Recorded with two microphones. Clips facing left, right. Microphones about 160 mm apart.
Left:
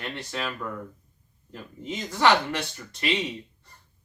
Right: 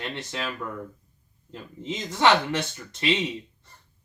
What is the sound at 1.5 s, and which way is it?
Speech, 20° right (ahead or behind).